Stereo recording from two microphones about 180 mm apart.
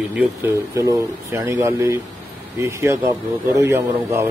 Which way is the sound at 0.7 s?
20° right (ahead or behind).